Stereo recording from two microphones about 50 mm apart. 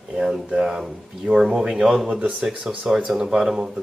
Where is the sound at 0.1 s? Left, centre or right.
Centre.